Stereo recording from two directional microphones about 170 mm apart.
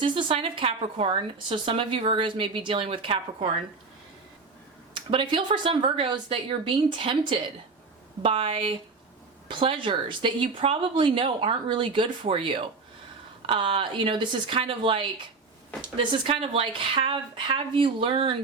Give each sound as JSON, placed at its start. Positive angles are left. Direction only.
{"t": 0.0, "sound": "speech", "side_deg": -30}
{"t": 4.9, "sound": "speech", "side_deg": -30}